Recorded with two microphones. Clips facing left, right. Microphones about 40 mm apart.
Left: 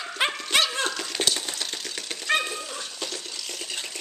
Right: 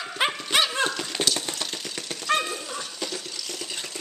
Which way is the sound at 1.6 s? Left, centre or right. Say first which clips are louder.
Even; centre.